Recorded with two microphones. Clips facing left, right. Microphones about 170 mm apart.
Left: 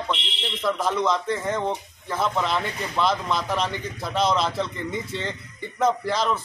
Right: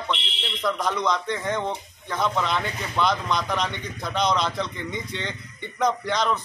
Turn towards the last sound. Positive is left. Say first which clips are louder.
# even
turn(degrees=5)  # may be behind; listen again after turning